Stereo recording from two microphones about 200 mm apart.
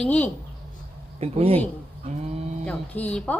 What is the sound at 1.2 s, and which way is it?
Speech, 30° right (ahead or behind).